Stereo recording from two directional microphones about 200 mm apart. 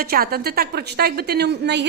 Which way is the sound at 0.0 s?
50° right (ahead or behind).